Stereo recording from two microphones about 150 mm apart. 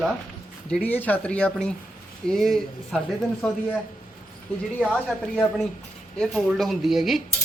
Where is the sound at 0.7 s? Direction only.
10° left (ahead or behind).